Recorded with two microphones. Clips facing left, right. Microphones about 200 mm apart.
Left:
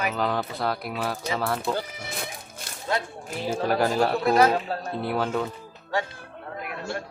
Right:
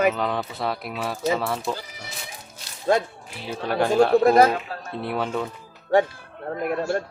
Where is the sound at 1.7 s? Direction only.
55° left (ahead or behind).